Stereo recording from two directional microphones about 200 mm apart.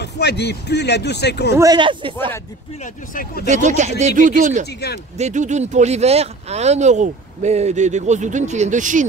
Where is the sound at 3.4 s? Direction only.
35° right (ahead or behind).